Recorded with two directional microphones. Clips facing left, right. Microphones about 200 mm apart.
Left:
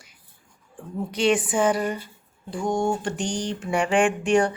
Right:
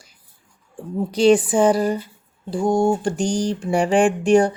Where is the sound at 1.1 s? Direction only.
35° right (ahead or behind).